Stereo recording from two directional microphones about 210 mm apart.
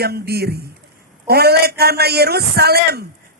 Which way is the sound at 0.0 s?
50° right (ahead or behind).